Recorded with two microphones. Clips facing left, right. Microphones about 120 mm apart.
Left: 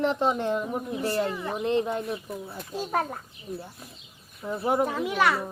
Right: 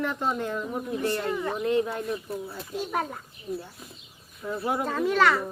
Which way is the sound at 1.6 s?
25° left (ahead or behind).